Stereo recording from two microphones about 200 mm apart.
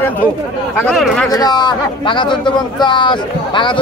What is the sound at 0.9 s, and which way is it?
Speech, centre (ahead or behind).